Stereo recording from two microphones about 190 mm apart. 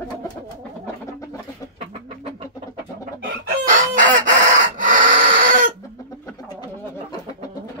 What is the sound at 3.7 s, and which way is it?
Fowl, 45° right (ahead or behind).